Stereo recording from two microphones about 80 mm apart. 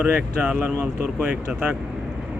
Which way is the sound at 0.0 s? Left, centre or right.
Centre.